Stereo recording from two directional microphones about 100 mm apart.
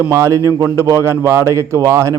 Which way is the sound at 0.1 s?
30° right (ahead or behind).